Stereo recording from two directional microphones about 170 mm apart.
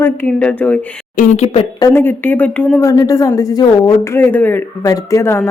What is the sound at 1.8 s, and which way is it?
Speech, 15° left (ahead or behind).